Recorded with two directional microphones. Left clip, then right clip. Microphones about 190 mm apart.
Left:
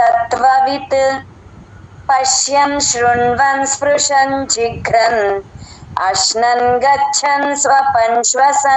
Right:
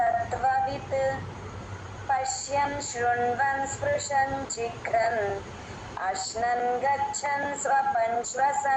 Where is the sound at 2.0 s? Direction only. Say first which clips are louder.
Left 15 dB; 55° left (ahead or behind).